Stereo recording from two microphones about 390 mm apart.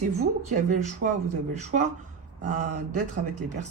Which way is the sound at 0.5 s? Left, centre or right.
Centre.